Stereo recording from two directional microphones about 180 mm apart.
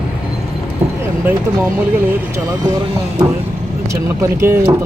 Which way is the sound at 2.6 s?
25° right (ahead or behind).